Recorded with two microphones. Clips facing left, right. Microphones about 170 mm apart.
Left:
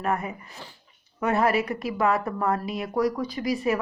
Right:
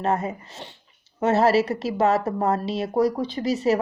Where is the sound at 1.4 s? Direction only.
40° right (ahead or behind).